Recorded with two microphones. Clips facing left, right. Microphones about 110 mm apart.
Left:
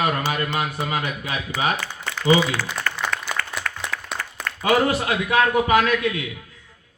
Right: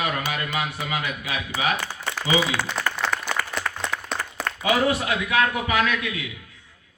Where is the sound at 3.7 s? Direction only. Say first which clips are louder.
Right 1 dB; 20° right (ahead or behind).